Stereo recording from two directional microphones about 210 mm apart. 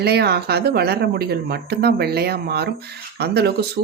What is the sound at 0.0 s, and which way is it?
Speech, 50° right (ahead or behind).